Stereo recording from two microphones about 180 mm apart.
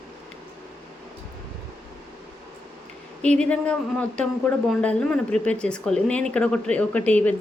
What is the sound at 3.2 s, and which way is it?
Speech, 5° left (ahead or behind).